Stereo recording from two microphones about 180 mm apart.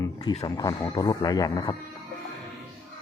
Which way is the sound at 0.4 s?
25° left (ahead or behind).